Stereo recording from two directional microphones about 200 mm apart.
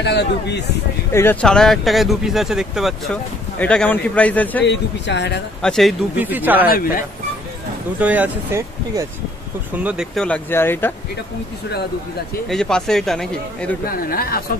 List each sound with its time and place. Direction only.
0.0 s speech: 55° left (ahead or behind)
1.1 s a man's voice: 10° left (ahead or behind)
4.6 s speech: 60° left (ahead or behind)
5.6 s speech: centre (ahead or behind)
6.1 s speech: 10° right (ahead or behind)
8.0 s speech: 10° right (ahead or behind)
9.8 s a man's voice: centre (ahead or behind)
12.4 s speech: centre (ahead or behind)
13.8 s speech: 45° left (ahead or behind)